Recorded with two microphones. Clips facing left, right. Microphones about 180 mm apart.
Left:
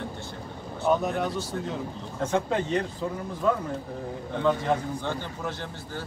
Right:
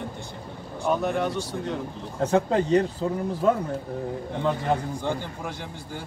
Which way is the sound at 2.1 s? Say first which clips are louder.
Right 4 dB; 35° right (ahead or behind).